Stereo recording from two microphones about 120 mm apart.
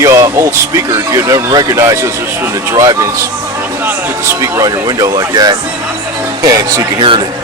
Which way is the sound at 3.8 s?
15° right (ahead or behind).